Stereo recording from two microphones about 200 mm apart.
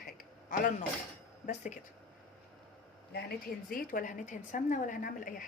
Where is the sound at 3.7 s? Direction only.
45° left (ahead or behind).